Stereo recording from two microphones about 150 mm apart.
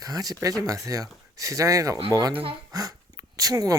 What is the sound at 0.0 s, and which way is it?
Speech, 25° right (ahead or behind).